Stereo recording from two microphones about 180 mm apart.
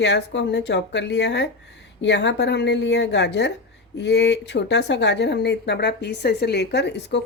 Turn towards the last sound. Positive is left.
turn(degrees=70)  # may be behind; listen again after turning